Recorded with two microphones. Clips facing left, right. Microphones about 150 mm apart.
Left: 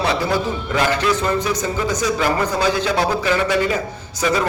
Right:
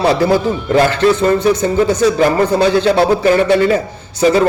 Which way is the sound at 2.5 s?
30° right (ahead or behind).